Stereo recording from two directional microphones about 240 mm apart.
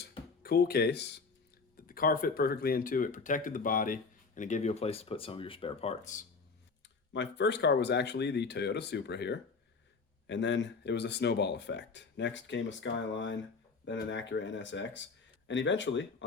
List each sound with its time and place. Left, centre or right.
0.4 s speech: left
7.1 s speech: left